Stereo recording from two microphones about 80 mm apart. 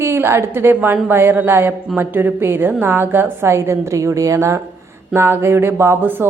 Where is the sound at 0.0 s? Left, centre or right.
Right.